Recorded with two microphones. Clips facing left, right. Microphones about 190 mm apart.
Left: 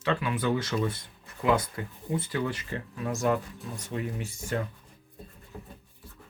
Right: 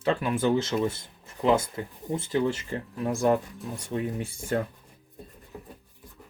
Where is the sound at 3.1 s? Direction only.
40° right (ahead or behind).